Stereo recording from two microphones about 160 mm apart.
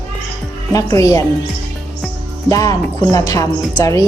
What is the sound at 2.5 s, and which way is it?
A woman's voice, 20° left (ahead or behind).